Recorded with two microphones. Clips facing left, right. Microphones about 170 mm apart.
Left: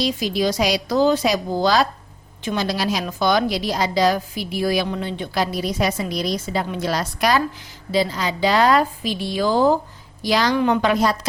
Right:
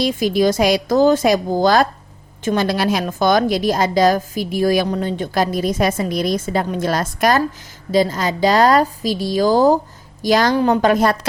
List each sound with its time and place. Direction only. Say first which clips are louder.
0.0 s a woman's voice: right 5 dB; 50° right (ahead or behind)